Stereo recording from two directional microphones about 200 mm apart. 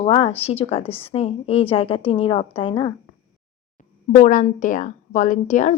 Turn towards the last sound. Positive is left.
turn(degrees=35)  # may be behind; listen again after turning